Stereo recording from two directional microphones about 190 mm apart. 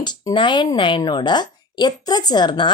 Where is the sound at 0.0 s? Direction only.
25° left (ahead or behind).